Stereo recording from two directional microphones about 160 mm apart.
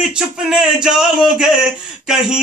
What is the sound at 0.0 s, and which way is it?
Speech, 5° right (ahead or behind).